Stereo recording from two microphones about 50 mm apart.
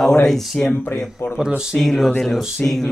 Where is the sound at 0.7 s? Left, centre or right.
Left.